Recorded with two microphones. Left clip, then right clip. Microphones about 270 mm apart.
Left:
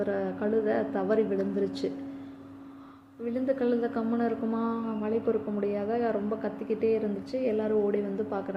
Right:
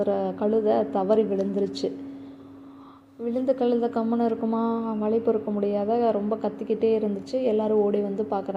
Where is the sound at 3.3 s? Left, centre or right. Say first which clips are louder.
Right 4 dB; centre.